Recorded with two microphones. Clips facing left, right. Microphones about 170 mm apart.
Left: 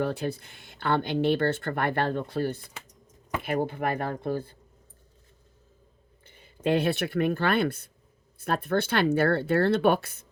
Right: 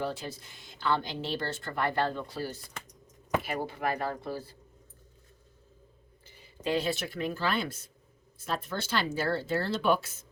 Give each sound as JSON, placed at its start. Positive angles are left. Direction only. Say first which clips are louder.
{"t": 0.0, "sound": "speech", "louder": "left 6 dB", "side_deg": 60}
{"t": 6.2, "sound": "speech", "louder": "left 6 dB", "side_deg": 55}